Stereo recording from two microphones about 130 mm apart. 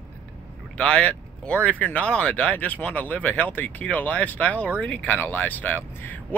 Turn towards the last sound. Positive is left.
turn(degrees=15)  # may be behind; listen again after turning